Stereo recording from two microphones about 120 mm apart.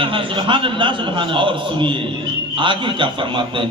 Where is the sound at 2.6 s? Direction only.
40° right (ahead or behind).